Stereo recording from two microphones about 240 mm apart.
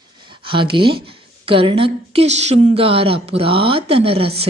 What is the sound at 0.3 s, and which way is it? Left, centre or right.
A woman's voice, right.